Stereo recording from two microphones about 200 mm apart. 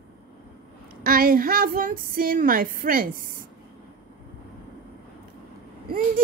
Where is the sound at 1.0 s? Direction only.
45° right (ahead or behind).